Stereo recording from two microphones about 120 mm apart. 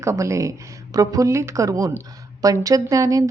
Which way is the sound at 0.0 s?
25° right (ahead or behind).